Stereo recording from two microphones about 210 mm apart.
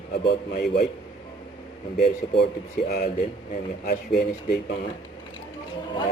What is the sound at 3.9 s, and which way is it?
Speech, 50° left (ahead or behind).